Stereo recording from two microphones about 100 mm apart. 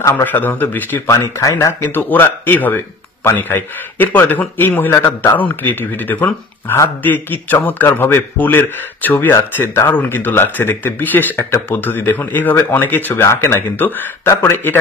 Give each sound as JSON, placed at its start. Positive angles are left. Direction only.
{"t": 0.1, "sound": "speech", "side_deg": 20}
{"t": 1.0, "sound": "speech", "side_deg": 30}